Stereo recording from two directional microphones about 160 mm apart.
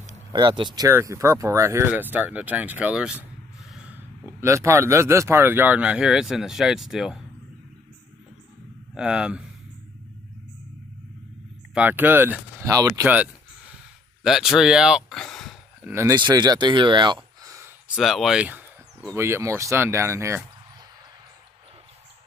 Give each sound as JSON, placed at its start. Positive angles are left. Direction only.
{"t": 0.3, "sound": "speech", "side_deg": -30}
{"t": 0.8, "sound": "speech", "side_deg": -15}
{"t": 8.9, "sound": "speech", "side_deg": -5}
{"t": 11.7, "sound": "speech", "side_deg": -10}
{"t": 13.0, "sound": "a sound", "side_deg": -10}
{"t": 14.2, "sound": "speech", "side_deg": 0}
{"t": 15.8, "sound": "speech", "side_deg": -15}
{"t": 16.2, "sound": "speech", "side_deg": -25}
{"t": 17.8, "sound": "speech", "side_deg": 0}